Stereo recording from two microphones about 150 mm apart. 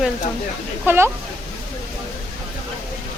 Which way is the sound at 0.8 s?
15° right (ahead or behind).